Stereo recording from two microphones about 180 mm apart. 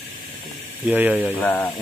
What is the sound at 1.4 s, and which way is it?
Speech, 10° left (ahead or behind).